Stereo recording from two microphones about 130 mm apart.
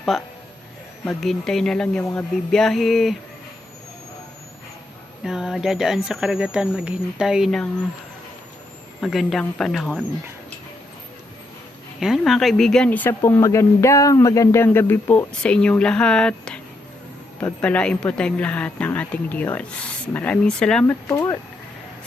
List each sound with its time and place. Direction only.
0.1 s speech: centre (ahead or behind)
5.2 s speech: 5° right (ahead or behind)
9.0 s speech: centre (ahead or behind)
11.9 s speech: centre (ahead or behind)
17.6 s speech: 10° left (ahead or behind)
21.1 s speech: 25° left (ahead or behind)